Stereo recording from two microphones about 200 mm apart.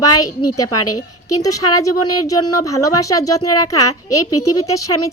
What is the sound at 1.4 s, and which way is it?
Speech, 15° left (ahead or behind).